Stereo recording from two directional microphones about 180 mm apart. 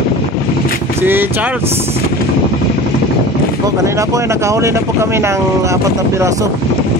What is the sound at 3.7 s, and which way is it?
Speech, 15° right (ahead or behind).